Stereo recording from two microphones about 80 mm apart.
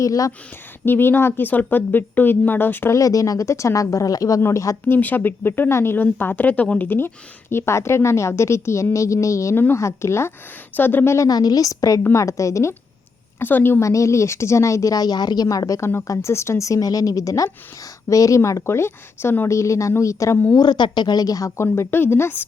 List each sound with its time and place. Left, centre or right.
0.0 s a woman's voice: left
0.9 s speech: left
2.9 s a woman's voice: left
4.9 s speech: left
11.3 s a woman's voice: left
13.4 s speech: left
13.8 s a woman's voice: left
19.5 s speech: left
20.6 s speech: left
21.6 s speech: left